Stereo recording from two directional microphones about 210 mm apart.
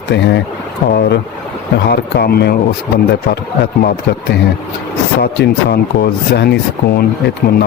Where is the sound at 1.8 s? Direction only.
55° left (ahead or behind).